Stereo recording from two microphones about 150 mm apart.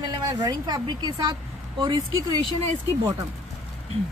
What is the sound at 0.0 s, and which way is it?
Speech, 30° right (ahead or behind).